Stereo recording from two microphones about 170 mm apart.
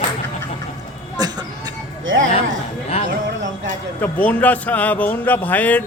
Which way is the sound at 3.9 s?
10° left (ahead or behind).